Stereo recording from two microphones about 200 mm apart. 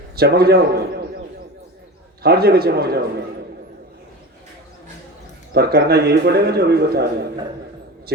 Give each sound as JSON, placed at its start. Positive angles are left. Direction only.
{"t": 0.2, "sound": "a man's voice", "side_deg": -50}
{"t": 2.2, "sound": "a man's voice", "side_deg": -50}
{"t": 5.5, "sound": "a man's voice", "side_deg": -50}